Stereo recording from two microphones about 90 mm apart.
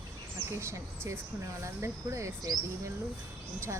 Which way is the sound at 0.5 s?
30° right (ahead or behind).